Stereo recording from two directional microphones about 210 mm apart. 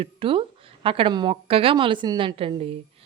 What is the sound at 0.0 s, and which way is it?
A woman's voice, 25° right (ahead or behind).